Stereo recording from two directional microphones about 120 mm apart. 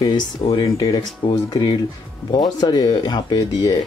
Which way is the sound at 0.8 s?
35° left (ahead or behind).